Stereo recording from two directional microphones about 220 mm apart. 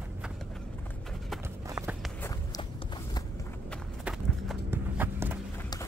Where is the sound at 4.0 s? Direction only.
5° right (ahead or behind).